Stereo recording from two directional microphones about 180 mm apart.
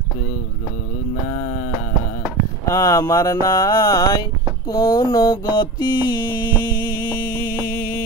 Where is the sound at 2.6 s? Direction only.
15° left (ahead or behind).